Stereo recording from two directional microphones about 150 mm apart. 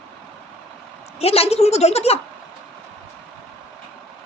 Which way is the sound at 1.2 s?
40° left (ahead or behind).